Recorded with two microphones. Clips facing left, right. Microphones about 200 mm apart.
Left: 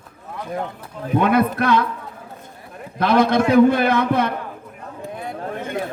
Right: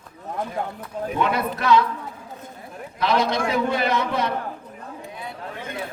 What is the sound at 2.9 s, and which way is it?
A man's voice, 55° left (ahead or behind).